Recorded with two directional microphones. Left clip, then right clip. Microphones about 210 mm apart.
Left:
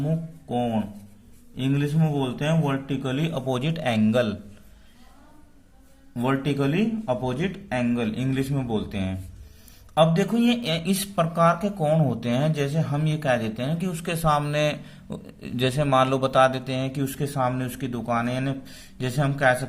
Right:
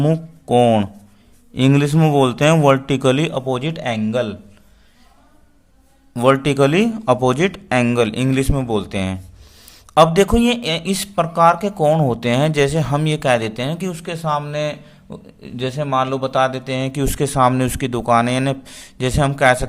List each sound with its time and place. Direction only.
0.0 s a man's voice: 45° right (ahead or behind); by 4.4 s 10° right (ahead or behind)
6.1 s a man's voice: 35° right (ahead or behind)
14.0 s speech: 10° right (ahead or behind); by 19.5 s 25° right (ahead or behind)